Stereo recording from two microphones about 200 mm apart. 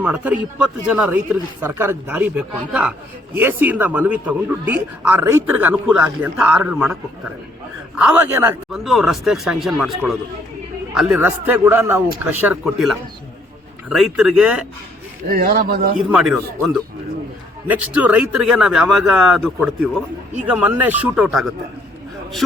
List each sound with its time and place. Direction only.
0.0 s speech: 5° right (ahead or behind)
7.9 s a man's voice: 5° right (ahead or behind)
15.3 s a man's voice: 50° right (ahead or behind)
16.0 s a man's voice: 5° right (ahead or behind)
17.7 s a man's voice: 5° right (ahead or behind)